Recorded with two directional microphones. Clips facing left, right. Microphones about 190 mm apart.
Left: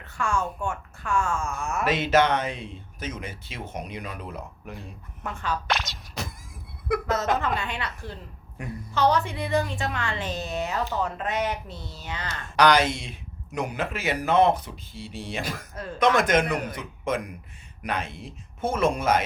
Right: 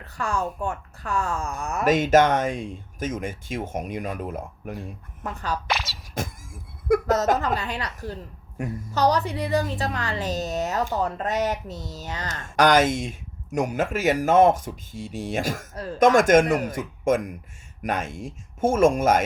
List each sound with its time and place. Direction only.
0.0 s a woman's voice: 35° right (ahead or behind)
5.6 s speech: centre (ahead or behind)
6.1 s a sound: 45° right (ahead or behind)
8.5 s a woman's voice: 40° right (ahead or behind)